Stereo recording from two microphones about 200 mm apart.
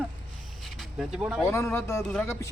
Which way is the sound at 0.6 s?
Centre (ahead or behind).